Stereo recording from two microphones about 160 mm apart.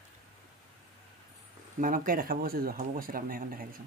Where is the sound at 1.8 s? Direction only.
60° right (ahead or behind).